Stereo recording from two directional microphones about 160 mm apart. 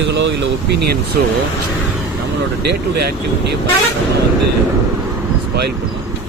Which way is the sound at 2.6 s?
80° right.